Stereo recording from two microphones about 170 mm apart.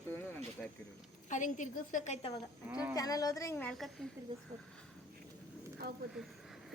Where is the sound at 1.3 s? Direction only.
50° left (ahead or behind).